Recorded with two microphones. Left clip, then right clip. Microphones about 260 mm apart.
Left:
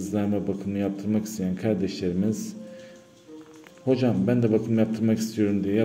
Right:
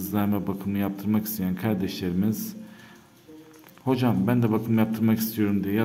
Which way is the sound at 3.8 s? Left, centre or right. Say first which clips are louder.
Left 1 dB; centre.